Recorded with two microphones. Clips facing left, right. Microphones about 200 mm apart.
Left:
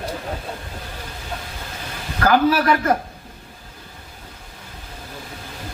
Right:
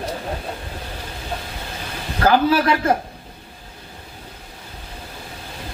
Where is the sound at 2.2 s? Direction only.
30° right (ahead or behind).